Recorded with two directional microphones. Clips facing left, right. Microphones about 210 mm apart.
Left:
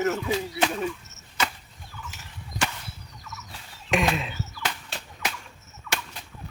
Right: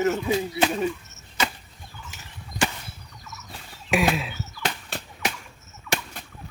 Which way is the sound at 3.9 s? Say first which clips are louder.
Right 2 dB; 5° right (ahead or behind).